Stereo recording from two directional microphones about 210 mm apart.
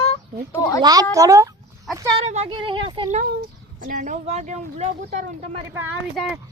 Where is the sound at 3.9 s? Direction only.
35° right (ahead or behind).